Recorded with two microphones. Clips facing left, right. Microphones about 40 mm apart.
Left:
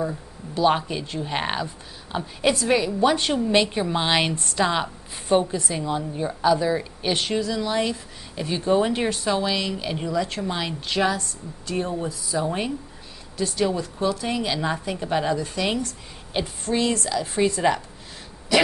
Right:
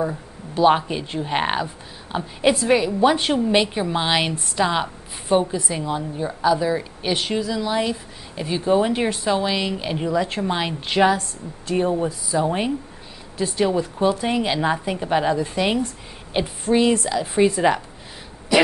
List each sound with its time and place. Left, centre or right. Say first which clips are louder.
0.0 s a woman's voice: right 3 dB; centre